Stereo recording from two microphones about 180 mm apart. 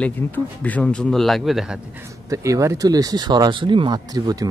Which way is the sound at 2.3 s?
15° right (ahead or behind).